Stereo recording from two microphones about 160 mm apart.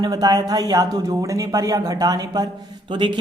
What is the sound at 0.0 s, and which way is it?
Speech, 25° right (ahead or behind).